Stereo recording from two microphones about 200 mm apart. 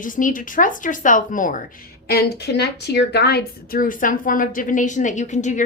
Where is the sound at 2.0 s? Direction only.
55° left (ahead or behind).